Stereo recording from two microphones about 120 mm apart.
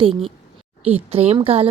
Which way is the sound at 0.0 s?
50° right (ahead or behind).